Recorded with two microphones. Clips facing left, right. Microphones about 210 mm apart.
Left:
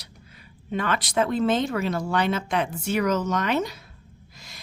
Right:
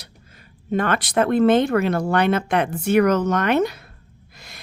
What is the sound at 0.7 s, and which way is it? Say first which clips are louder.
Speech: right 5 dB; 50° right (ahead or behind).